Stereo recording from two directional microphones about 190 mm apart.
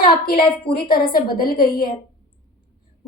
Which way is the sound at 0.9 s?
50° left (ahead or behind).